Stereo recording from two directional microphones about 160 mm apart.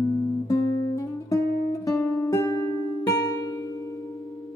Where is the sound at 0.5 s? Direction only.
25° left (ahead or behind).